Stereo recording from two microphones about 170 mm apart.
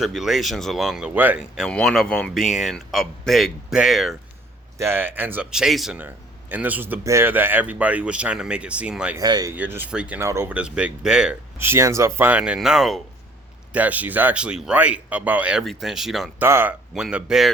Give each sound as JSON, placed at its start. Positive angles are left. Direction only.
{"t": 0.0, "sound": "speech", "side_deg": 0}
{"t": 4.8, "sound": "speech", "side_deg": -15}
{"t": 9.1, "sound": "speech", "side_deg": -20}
{"t": 9.6, "sound": "speech", "side_deg": -10}
{"t": 11.6, "sound": "speech", "side_deg": -15}
{"t": 16.4, "sound": "speech", "side_deg": -10}